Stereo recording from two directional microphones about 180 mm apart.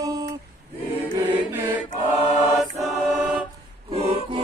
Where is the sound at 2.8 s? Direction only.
Centre (ahead or behind).